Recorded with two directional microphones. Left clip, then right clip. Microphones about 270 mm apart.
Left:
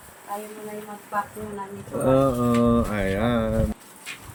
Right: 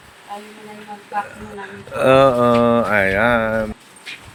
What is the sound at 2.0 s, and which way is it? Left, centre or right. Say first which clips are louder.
Speech: right 9 dB; centre.